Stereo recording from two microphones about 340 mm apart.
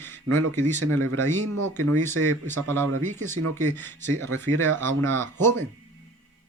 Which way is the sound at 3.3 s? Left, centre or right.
Right.